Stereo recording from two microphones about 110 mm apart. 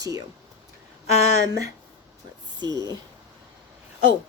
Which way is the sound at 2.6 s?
40° right (ahead or behind).